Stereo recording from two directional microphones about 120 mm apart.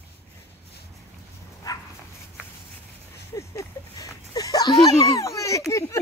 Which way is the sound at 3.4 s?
25° left (ahead or behind).